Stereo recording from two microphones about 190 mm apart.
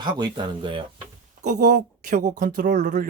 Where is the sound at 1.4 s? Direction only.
45° right (ahead or behind).